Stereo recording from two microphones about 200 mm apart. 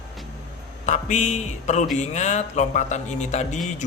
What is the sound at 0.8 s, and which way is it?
Speech, 35° left (ahead or behind).